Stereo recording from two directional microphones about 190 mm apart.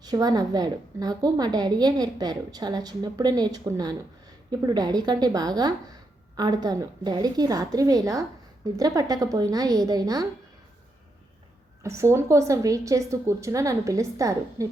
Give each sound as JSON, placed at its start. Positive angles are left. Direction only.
{"t": 0.0, "sound": "a woman's voice", "side_deg": -20}
{"t": 11.8, "sound": "a woman's voice", "side_deg": -15}